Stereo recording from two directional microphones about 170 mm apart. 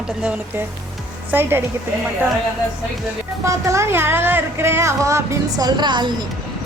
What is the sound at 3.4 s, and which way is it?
Speech, 15° right (ahead or behind).